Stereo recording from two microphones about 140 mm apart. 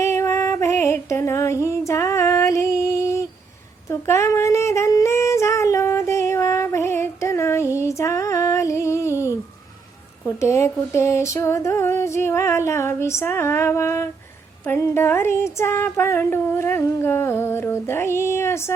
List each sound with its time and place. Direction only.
0.0 s female singing: 20° left (ahead or behind)
3.8 s singing: 20° left (ahead or behind)
10.2 s a sound: 20° left (ahead or behind)
14.8 s female singing: 20° left (ahead or behind)